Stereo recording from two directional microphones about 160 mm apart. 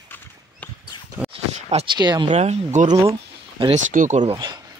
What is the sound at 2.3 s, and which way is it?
Speech, 45° right (ahead or behind).